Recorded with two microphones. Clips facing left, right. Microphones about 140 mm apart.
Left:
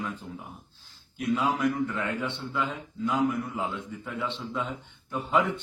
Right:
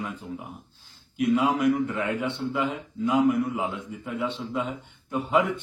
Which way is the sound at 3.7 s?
Centre (ahead or behind).